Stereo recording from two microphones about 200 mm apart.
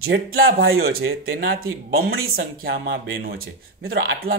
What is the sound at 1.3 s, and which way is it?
Speech, 55° right (ahead or behind).